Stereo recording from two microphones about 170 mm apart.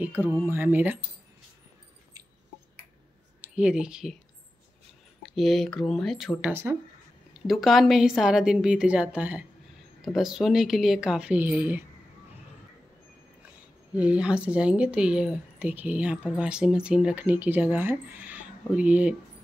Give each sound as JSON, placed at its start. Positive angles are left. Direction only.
{"t": 0.0, "sound": "speech", "side_deg": -10}
{"t": 3.3, "sound": "speech", "side_deg": -10}
{"t": 5.2, "sound": "a woman's voice", "side_deg": 0}
{"t": 6.5, "sound": "speech", "side_deg": -15}
{"t": 7.3, "sound": "a woman's voice", "side_deg": 0}
{"t": 13.9, "sound": "speech", "side_deg": -5}